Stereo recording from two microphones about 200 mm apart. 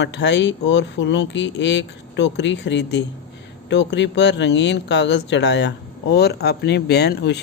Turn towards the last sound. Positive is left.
turn(degrees=55)  # may be behind; listen again after turning